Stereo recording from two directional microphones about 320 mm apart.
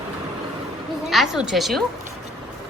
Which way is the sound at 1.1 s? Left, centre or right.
Centre.